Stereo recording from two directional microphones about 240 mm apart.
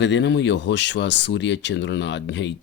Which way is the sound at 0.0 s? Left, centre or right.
Left.